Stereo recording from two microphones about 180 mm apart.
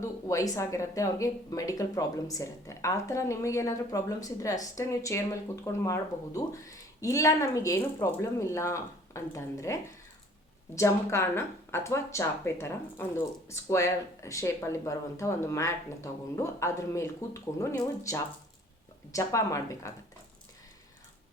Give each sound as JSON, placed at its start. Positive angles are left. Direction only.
{"t": 0.0, "sound": "speech", "side_deg": 15}
{"t": 10.8, "sound": "speech", "side_deg": 15}